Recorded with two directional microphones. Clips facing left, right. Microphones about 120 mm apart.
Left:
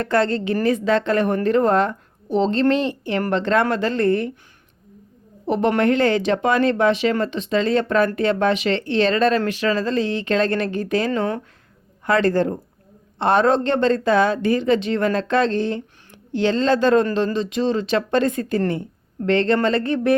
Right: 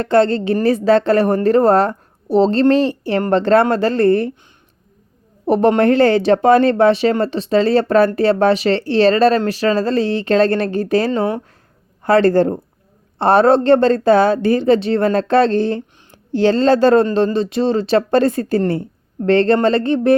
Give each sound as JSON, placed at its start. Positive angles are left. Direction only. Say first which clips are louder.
{"t": 0.0, "sound": "a woman's voice", "louder": "right 6 dB", "side_deg": -30}
{"t": 5.5, "sound": "a woman's voice", "louder": "right 5 dB", "side_deg": -40}